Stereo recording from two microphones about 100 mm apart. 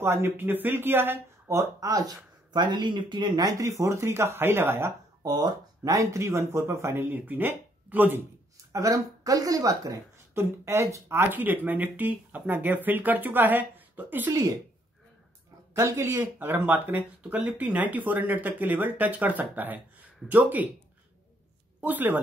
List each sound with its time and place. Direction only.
0.0 s speech: 25° right (ahead or behind)
2.5 s speech: 50° right (ahead or behind); by 4.9 s 25° right (ahead or behind)
5.2 s speech: 40° right (ahead or behind); by 8.2 s 20° right (ahead or behind)
8.7 s speech: 35° right (ahead or behind); by 14.3 s 20° right (ahead or behind)
15.7 s speech: 30° right (ahead or behind)
21.8 s speech: 15° right (ahead or behind)